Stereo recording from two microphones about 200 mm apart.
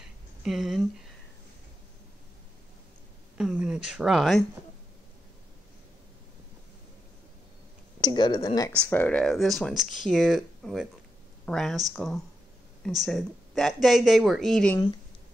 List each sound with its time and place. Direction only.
0.4 s speech: centre (ahead or behind)
3.3 s speech: 5° right (ahead or behind)
8.0 s speech: 20° left (ahead or behind); by 14.8 s 5° left (ahead or behind)